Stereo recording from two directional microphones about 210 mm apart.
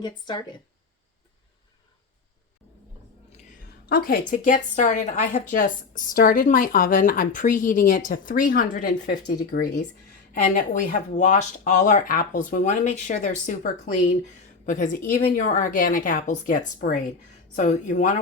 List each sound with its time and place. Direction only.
0.0 s speech: 20° left (ahead or behind)
3.8 s a woman's voice: 45° left (ahead or behind)